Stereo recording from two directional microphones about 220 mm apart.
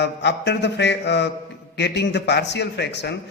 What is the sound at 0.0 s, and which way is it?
A man's voice, 50° left (ahead or behind).